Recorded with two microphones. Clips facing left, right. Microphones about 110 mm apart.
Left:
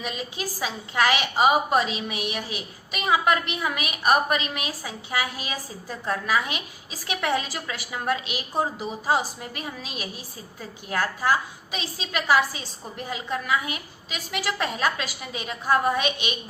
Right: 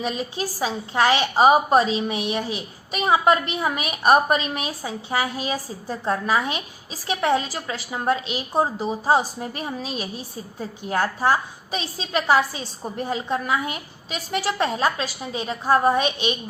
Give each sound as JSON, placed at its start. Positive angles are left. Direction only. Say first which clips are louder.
{"t": 0.0, "sound": "a woman's voice", "louder": "right 5 dB", "side_deg": -30}